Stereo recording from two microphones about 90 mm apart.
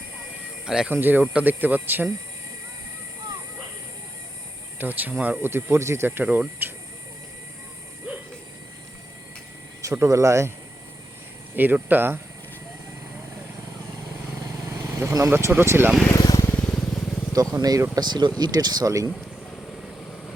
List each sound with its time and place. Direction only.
0.6 s speech: 5° right (ahead or behind)
0.9 s speech: 20° right (ahead or behind)
4.8 s speech: 20° right (ahead or behind)
6.1 s speech: 20° right (ahead or behind)
9.8 s speech: 35° right (ahead or behind)
11.5 s speech: 20° right (ahead or behind)
14.9 s speech: 35° right (ahead or behind)
16.1 s vehicle: 45° left (ahead or behind)
16.5 s vehicle: 15° left (ahead or behind)
17.3 s speech: 40° right (ahead or behind)
17.9 s speech: 55° right (ahead or behind); by 19.1 s 40° right (ahead or behind)